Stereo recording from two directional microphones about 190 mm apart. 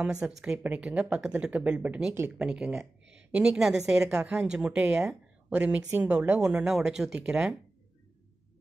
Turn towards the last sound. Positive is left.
turn(degrees=-5)  # may be behind; listen again after turning